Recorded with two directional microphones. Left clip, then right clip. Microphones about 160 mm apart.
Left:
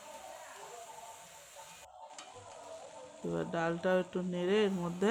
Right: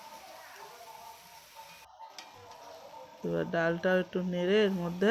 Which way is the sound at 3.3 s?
15° right (ahead or behind).